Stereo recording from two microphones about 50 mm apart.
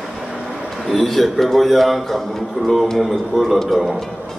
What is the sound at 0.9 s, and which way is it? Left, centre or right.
Speech, centre.